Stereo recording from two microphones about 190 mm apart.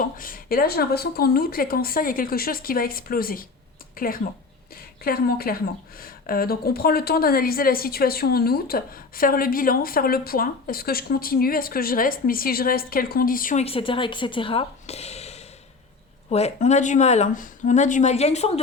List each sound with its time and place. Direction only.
0.0 s speech: 45° left (ahead or behind)
13.7 s speech: 30° left (ahead or behind)